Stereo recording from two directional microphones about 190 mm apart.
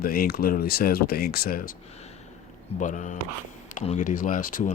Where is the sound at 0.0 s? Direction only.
50° left (ahead or behind).